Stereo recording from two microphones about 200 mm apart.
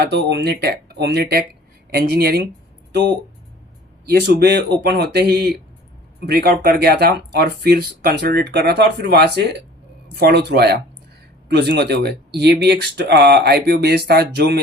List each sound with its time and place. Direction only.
0.0 s speech: 55° right (ahead or behind)
4.4 s speech: 55° right (ahead or behind)